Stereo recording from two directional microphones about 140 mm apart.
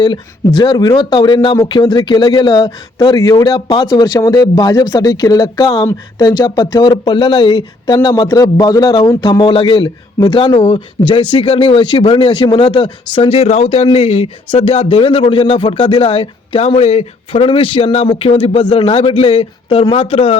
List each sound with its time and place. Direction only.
0.0 s speech: 35° left (ahead or behind)
7.9 s speech: 25° left (ahead or behind); by 20.4 s 45° left (ahead or behind)